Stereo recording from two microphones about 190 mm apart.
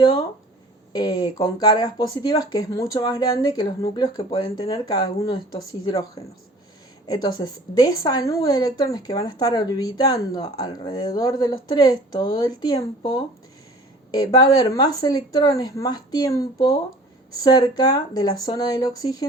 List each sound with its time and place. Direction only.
0.9 s a woman's voice: 20° left (ahead or behind)